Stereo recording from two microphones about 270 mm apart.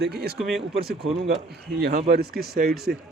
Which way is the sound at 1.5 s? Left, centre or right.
Right.